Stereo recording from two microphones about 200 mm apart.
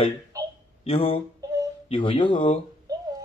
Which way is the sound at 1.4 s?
15° right (ahead or behind).